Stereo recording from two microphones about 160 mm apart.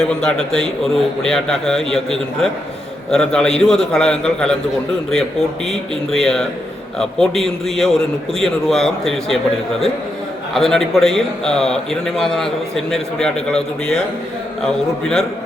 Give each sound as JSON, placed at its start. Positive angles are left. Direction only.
{"t": 0.0, "sound": "a man's voice", "side_deg": 5}
{"t": 5.6, "sound": "a man's voice", "side_deg": 0}
{"t": 10.5, "sound": "a man's voice", "side_deg": 0}